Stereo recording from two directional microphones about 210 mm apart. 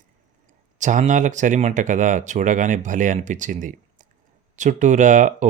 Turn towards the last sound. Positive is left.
turn(degrees=-35)  # may be behind; listen again after turning